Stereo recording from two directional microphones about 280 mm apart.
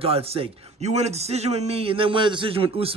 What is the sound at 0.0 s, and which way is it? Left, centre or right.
A man's voice, right.